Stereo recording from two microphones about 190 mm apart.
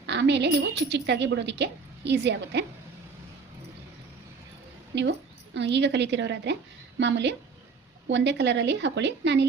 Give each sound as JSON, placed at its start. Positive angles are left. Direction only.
{"t": 0.0, "sound": "a woman's voice", "side_deg": -65}
{"t": 4.9, "sound": "a woman's voice", "side_deg": -65}